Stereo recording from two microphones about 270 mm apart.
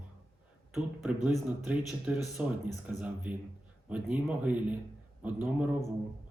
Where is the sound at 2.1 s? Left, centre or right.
Centre.